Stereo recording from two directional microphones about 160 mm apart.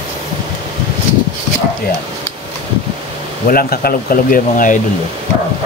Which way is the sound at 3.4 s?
65° left (ahead or behind).